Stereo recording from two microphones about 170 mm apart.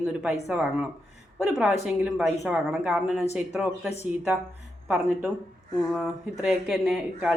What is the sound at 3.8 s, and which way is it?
Speech, 40° left (ahead or behind).